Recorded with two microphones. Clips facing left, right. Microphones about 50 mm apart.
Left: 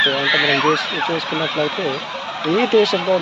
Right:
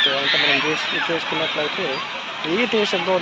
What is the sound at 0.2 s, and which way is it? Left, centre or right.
Speech, left.